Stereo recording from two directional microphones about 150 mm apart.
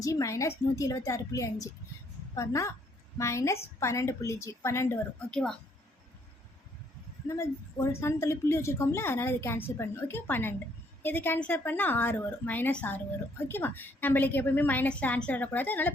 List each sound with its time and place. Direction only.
0.0 s a woman's voice: 20° left (ahead or behind)
5.3 s a woman's voice: 5° left (ahead or behind)
7.3 s a woman's voice: 20° left (ahead or behind)